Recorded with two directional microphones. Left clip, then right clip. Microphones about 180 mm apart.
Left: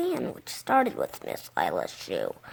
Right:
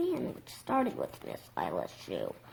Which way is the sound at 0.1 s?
45° left (ahead or behind).